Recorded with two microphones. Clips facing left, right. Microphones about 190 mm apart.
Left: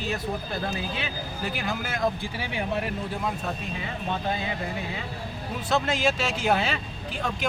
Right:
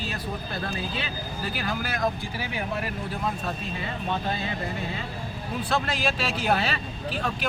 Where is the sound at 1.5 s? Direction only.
25° left (ahead or behind).